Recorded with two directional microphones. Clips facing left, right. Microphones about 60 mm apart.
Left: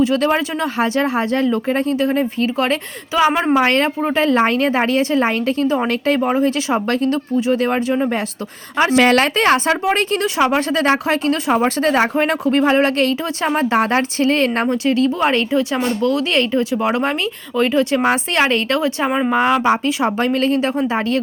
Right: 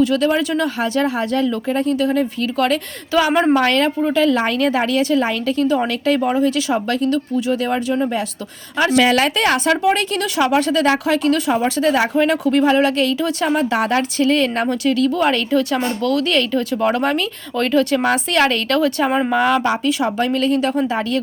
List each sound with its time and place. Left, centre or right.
0.2 s speech: left
3.3 s a woman's voice: centre
3.6 s speech: left
9.0 s speech: left
19.0 s speech: centre
19.6 s speech: left